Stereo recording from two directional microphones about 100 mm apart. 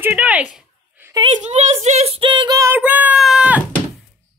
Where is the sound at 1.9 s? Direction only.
85° right.